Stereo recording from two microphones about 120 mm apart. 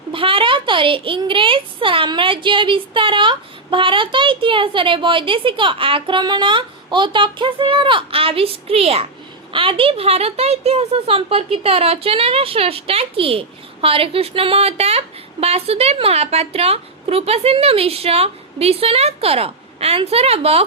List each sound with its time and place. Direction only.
0.1 s a woman's voice: 45° right (ahead or behind)